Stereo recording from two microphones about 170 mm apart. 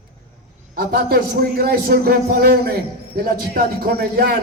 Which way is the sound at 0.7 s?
60° right (ahead or behind).